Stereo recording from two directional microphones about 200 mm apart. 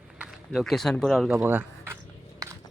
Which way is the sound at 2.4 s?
15° right (ahead or behind).